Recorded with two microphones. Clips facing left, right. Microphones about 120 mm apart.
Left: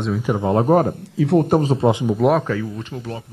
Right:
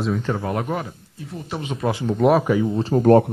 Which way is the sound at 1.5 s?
40° left (ahead or behind).